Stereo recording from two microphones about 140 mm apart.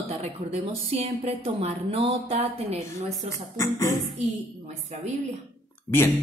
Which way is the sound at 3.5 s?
20° left (ahead or behind).